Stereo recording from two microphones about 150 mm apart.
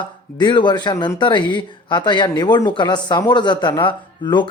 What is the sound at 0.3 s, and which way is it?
Speech, 30° left (ahead or behind).